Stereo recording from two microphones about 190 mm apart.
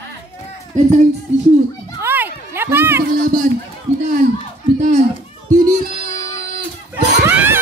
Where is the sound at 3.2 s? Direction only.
45° right (ahead or behind).